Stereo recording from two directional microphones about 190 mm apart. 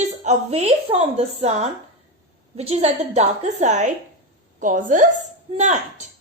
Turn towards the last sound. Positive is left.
turn(degrees=-35)  # may be behind; listen again after turning